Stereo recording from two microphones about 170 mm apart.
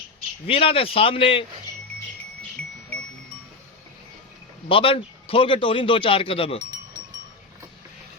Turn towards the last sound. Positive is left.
turn(degrees=35)  # may be behind; listen again after turning